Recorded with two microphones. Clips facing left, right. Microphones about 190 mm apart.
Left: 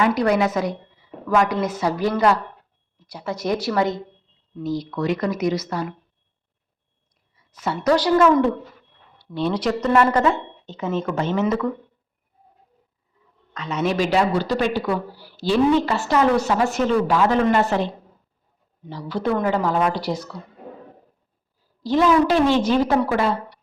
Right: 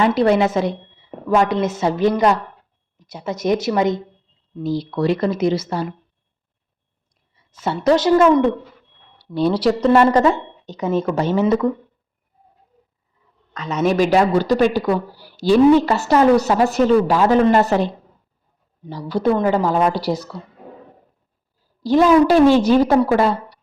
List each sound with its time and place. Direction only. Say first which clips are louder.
0.0 s a woman's voice: right 3 dB; 25° right (ahead or behind)
4.6 s speech: right 4 dB; 30° right (ahead or behind)
7.3 s speech: right 3 dB; 25° right (ahead or behind)
9.1 s a woman's voice: right 5 dB; 35° right (ahead or behind)
13.5 s a woman's voice: right 4 dB; 40° right (ahead or behind)
18.9 s a woman's voice: right 5 dB; 40° right (ahead or behind)
21.8 s a woman's voice: right 4 dB; 40° right (ahead or behind)